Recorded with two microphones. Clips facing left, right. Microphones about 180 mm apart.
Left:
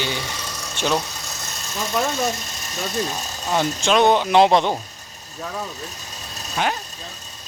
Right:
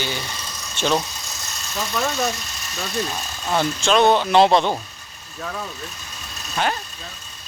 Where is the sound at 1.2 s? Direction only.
50° left (ahead or behind).